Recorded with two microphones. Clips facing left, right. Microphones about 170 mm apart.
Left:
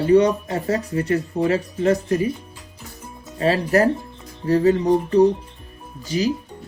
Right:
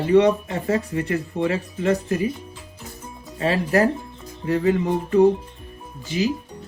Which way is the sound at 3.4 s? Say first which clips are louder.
Left 2 dB; 35° left (ahead or behind).